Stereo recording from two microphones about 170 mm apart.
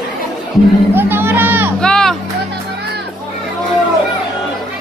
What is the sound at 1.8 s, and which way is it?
Vehicle, 5° left (ahead or behind).